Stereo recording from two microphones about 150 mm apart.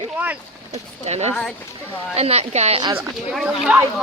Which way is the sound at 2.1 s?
45° right (ahead or behind).